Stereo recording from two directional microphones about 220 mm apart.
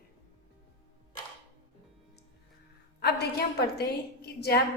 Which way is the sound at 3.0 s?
50° left (ahead or behind).